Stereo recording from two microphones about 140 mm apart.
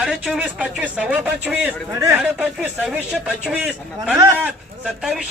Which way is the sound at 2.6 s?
5° right (ahead or behind).